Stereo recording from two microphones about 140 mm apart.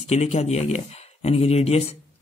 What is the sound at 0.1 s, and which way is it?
Speech, 50° left (ahead or behind).